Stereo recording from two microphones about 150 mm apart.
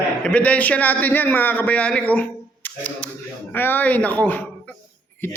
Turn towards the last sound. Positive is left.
turn(degrees=15)  # may be behind; listen again after turning